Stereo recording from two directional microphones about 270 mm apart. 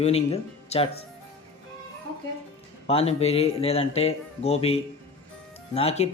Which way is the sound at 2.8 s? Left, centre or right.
Left.